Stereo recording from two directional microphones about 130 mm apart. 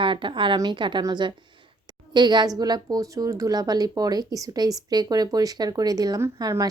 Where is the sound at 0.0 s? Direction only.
40° right (ahead or behind).